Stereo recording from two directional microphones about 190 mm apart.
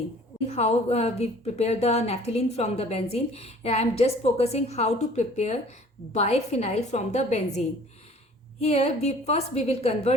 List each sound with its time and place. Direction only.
0.5 s a woman's voice: 35° left (ahead or behind)
8.6 s a woman's voice: 35° left (ahead or behind)